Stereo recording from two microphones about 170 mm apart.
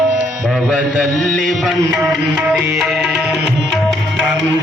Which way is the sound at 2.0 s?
15° right (ahead or behind).